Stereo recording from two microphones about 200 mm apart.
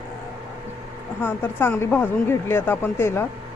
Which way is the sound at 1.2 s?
10° left (ahead or behind).